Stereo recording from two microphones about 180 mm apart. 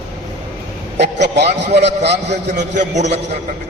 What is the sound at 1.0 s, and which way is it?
A man's voice, 65° right (ahead or behind).